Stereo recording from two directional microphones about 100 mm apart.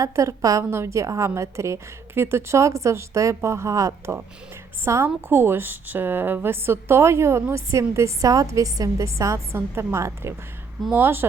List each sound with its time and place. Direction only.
0.0 s a woman's voice: 30° right (ahead or behind)